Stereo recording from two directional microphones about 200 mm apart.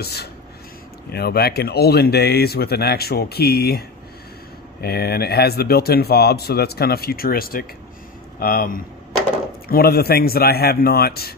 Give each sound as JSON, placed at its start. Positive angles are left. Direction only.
{"t": 0.0, "sound": "speech", "side_deg": 55}
{"t": 4.8, "sound": "speech", "side_deg": 50}